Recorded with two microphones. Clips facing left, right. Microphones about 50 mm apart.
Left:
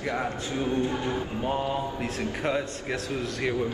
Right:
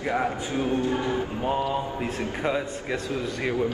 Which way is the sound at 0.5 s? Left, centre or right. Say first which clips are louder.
Right 1 dB; right.